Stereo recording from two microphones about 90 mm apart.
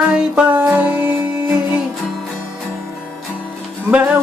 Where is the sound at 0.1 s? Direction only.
10° right (ahead or behind).